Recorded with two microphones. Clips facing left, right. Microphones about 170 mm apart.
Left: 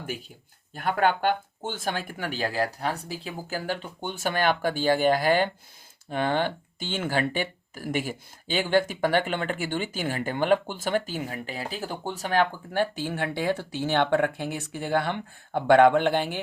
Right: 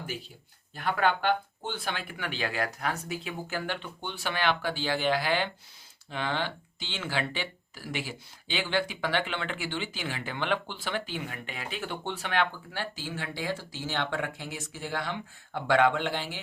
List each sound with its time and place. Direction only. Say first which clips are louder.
0.7 s speech: left 3 dB; 45° left (ahead or behind)